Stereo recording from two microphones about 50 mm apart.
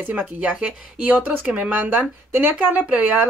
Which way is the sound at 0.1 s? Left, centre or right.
Right.